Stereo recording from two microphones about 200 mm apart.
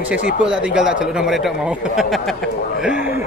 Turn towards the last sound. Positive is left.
turn(degrees=-5)  # may be behind; listen again after turning